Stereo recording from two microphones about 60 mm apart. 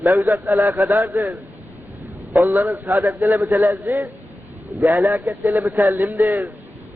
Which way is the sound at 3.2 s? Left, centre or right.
Right.